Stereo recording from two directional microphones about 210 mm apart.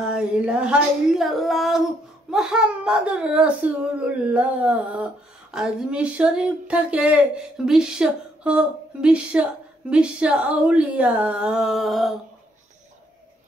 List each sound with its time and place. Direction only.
0.1 s speech: 5° right (ahead or behind)